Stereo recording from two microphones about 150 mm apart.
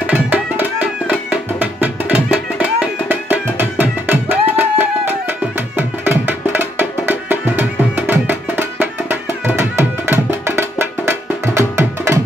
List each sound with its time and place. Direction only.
0.0 s music: 10° right (ahead or behind)